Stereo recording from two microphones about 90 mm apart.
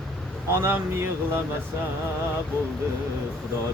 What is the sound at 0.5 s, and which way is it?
Speech, 30° right (ahead or behind).